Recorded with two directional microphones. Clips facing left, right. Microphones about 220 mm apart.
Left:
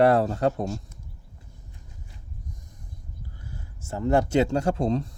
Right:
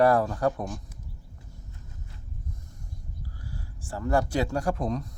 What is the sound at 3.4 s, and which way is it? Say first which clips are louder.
Speech: right 1 dB; 20° left (ahead or behind).